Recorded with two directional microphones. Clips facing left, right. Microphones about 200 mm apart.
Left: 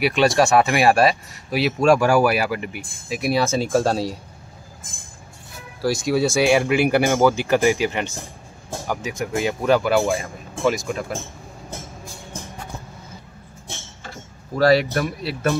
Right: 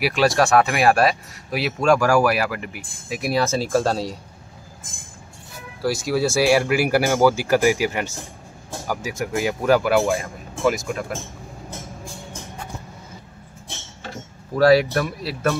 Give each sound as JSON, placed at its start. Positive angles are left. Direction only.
{"t": 0.0, "sound": "speech", "side_deg": 0}
{"t": 5.8, "sound": "speech", "side_deg": 0}
{"t": 14.6, "sound": "speech", "side_deg": 0}